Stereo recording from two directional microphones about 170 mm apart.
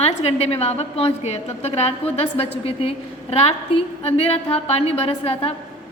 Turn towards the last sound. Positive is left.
turn(degrees=35)  # may be behind; listen again after turning